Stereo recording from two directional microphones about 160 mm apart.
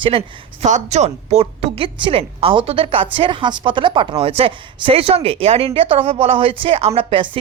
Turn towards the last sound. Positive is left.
turn(degrees=-35)  # may be behind; listen again after turning